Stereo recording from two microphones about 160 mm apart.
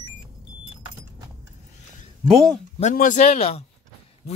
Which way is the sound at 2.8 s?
55° left (ahead or behind).